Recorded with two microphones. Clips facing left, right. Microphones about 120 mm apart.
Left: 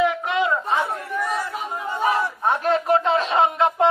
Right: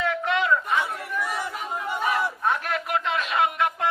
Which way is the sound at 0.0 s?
20° left (ahead or behind).